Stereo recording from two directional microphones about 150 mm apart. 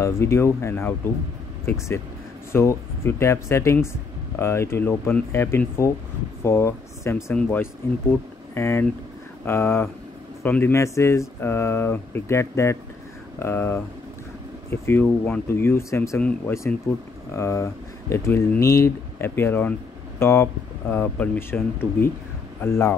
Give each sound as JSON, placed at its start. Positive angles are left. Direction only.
{"t": 0.0, "sound": "speech", "side_deg": 20}
{"t": 2.5, "sound": "speech", "side_deg": 15}
{"t": 16.2, "sound": "speech", "side_deg": 10}
{"t": 17.3, "sound": "speech", "side_deg": 20}